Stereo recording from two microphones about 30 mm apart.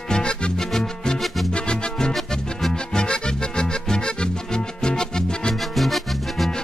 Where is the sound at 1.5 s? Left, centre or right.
Left.